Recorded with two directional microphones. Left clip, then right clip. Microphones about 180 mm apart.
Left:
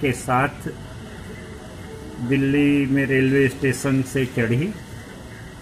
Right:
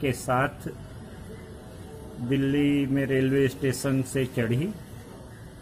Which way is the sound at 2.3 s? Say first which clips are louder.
Left 6 dB; 30° right (ahead or behind).